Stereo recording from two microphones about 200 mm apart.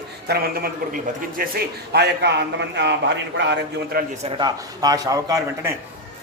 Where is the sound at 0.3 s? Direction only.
50° right (ahead or behind).